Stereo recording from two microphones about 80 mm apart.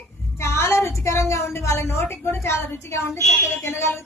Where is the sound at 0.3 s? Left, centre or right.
Left.